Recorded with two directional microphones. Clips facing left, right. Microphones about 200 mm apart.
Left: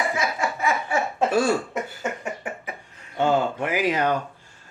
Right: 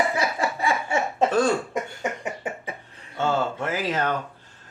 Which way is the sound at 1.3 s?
10° left (ahead or behind).